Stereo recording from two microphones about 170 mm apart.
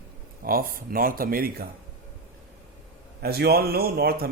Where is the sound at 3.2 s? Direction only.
65° right (ahead or behind).